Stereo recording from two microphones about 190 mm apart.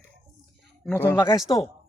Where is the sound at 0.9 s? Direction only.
10° left (ahead or behind).